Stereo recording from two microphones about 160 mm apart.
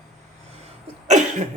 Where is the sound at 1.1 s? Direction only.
45° right (ahead or behind).